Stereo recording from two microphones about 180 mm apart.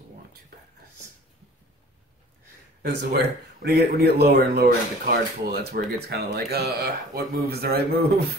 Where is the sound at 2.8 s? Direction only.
65° right (ahead or behind).